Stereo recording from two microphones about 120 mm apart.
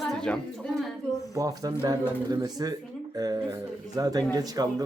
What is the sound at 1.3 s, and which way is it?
Speech, 30° right (ahead or behind).